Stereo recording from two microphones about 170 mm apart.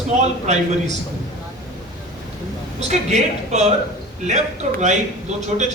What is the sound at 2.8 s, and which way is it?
Speech, 40° right (ahead or behind).